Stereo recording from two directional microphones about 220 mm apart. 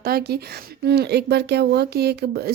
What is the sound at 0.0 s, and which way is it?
Speech, 45° right (ahead or behind).